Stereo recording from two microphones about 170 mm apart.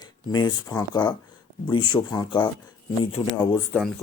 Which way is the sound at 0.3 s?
25° left (ahead or behind).